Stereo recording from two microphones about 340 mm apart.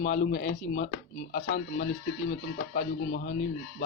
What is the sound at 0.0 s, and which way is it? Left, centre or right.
Speech, left.